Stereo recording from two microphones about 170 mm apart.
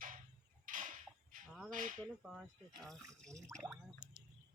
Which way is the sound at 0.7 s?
55° right (ahead or behind).